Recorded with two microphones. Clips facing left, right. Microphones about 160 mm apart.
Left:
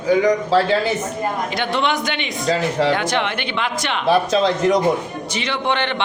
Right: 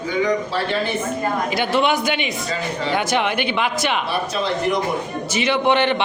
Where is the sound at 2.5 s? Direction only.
85° left.